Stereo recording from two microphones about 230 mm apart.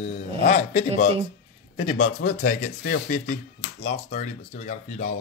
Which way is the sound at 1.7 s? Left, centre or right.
Left.